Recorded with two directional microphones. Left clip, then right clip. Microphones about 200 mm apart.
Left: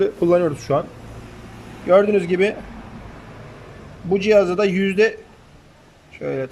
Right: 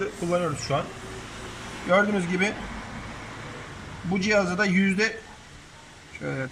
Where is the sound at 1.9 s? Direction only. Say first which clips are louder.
Left 8 dB; 15° left (ahead or behind).